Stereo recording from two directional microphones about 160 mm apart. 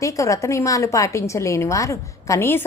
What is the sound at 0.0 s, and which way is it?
A woman's voice, 20° left (ahead or behind).